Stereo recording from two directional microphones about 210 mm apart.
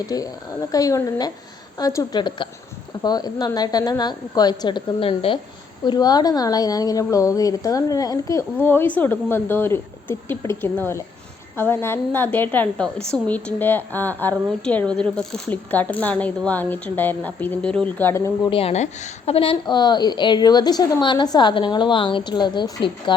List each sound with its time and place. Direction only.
0.1 s a woman's voice: 15° left (ahead or behind)
18.5 s a woman's voice: 30° left (ahead or behind)